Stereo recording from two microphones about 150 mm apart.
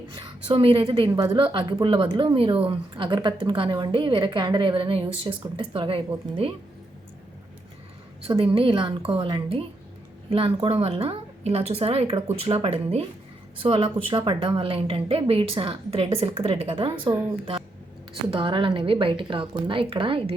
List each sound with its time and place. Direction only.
0.2 s a woman's voice: 35° right (ahead or behind)
8.2 s a woman's voice: 40° right (ahead or behind)